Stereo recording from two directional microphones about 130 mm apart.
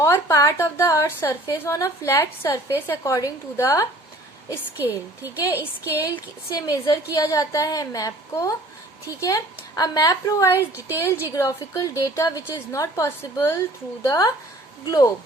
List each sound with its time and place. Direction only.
0.0 s a woman's voice: 20° left (ahead or behind)
4.8 s a woman's voice: 15° right (ahead or behind)
6.5 s a woman's voice: 30° left (ahead or behind)